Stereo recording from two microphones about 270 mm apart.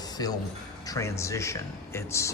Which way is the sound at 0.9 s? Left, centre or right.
Centre.